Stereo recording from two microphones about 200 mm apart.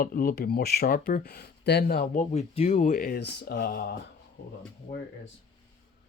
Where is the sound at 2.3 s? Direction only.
30° left (ahead or behind); by 3.9 s 50° left (ahead or behind).